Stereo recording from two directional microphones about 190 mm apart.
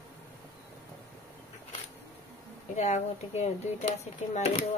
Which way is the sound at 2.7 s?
35° left (ahead or behind).